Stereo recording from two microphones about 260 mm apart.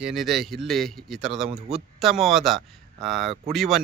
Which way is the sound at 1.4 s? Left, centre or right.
Right.